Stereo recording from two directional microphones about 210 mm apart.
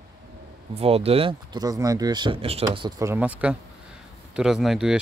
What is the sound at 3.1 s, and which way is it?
Speech, 5° right (ahead or behind).